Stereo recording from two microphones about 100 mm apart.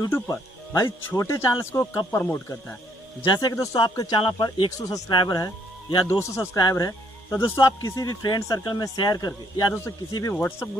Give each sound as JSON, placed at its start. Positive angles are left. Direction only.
{"t": 0.1, "sound": "speech", "side_deg": 30}
{"t": 3.3, "sound": "speech", "side_deg": 40}
{"t": 4.2, "sound": "speech", "side_deg": 55}
{"t": 6.0, "sound": "speech", "side_deg": 30}
{"t": 10.3, "sound": "speech", "side_deg": 20}